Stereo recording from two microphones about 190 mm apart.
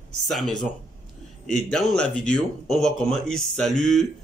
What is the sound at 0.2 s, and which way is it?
Speech, centre (ahead or behind).